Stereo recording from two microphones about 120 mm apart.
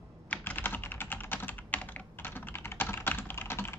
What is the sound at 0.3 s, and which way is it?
Computer keyboard, 15° left (ahead or behind).